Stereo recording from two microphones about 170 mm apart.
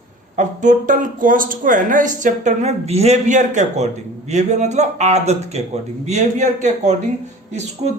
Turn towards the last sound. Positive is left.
turn(degrees=-40)  # may be behind; listen again after turning